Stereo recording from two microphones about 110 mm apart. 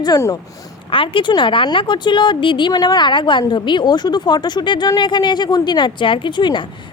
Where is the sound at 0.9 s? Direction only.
50° left (ahead or behind).